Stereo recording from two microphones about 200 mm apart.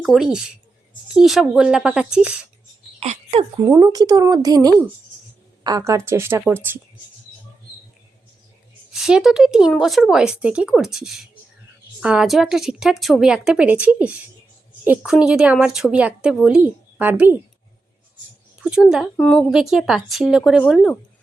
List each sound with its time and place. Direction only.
0.0 s speech: centre (ahead or behind)
3.0 s a sound: 30° right (ahead or behind)
3.7 s speech: 20° right (ahead or behind)
8.9 s speech: 5° right (ahead or behind)
18.6 s speech: centre (ahead or behind)